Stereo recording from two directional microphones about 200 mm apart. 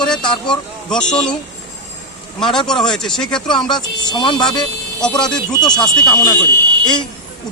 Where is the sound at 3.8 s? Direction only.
20° left (ahead or behind).